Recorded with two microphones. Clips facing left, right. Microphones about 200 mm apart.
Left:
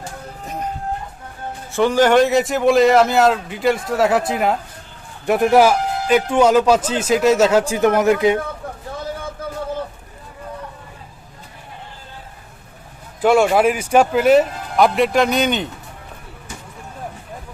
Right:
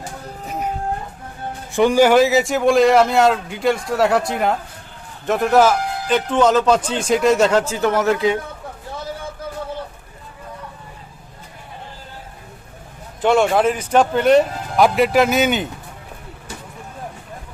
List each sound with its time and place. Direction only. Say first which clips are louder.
1.7 s speech: right 1 dB; 15° right (ahead or behind); by 4.5 s centre (ahead or behind)
5.2 s a man's voice: left 2 dB; 15° left (ahead or behind)
7.6 s a man's voice: left 3 dB; 15° left (ahead or behind)
13.2 s speech: left 1 dB; 10° left (ahead or behind)